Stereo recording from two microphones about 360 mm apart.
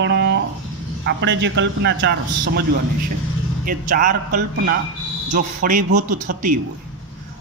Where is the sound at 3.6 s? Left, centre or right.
Right.